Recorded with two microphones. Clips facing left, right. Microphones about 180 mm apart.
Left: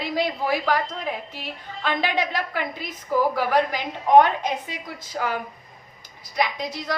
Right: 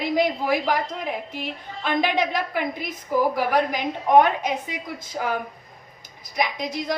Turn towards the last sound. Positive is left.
turn(degrees=-15)  # may be behind; listen again after turning